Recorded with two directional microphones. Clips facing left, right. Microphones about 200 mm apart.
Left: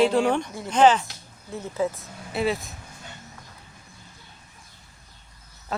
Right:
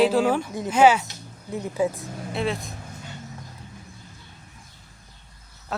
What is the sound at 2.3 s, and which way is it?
Speech, centre (ahead or behind).